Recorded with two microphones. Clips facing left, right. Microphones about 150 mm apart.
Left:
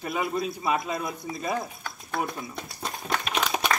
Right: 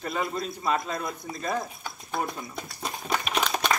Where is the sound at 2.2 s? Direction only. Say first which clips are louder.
Left 1 dB; centre (ahead or behind).